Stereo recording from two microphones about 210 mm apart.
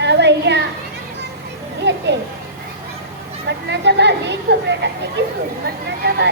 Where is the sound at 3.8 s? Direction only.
55° right (ahead or behind).